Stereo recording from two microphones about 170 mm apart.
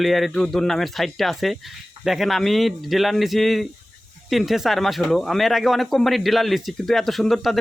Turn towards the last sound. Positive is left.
turn(degrees=0)  # may be behind; listen again after turning